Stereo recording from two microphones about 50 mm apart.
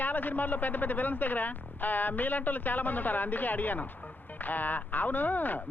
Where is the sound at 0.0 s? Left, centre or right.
Left.